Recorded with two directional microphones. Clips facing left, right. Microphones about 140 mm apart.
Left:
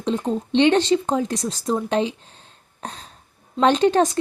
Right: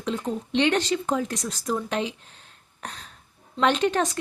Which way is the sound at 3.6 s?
35° left (ahead or behind).